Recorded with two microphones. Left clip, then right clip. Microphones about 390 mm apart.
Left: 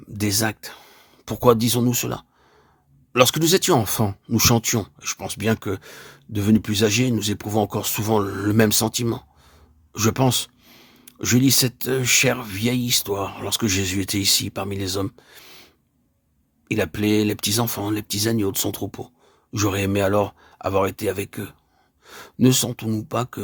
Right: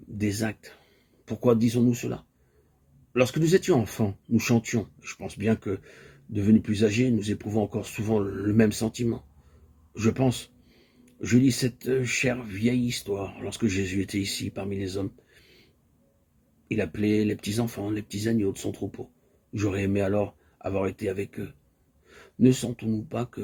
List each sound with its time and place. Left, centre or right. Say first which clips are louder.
0.2 s speech: left 7 dB; left
16.6 s speech: left 5 dB; left